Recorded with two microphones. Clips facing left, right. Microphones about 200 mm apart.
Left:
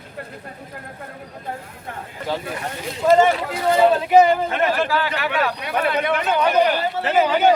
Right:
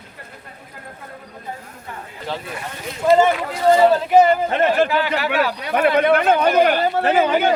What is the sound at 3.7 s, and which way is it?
Speech, centre (ahead or behind).